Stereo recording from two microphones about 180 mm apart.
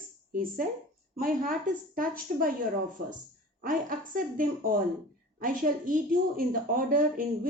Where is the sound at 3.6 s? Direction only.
50° right (ahead or behind).